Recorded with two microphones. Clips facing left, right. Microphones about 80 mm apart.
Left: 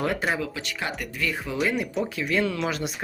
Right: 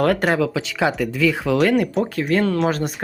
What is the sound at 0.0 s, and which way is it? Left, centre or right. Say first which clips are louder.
Speech: right 8 dB; right.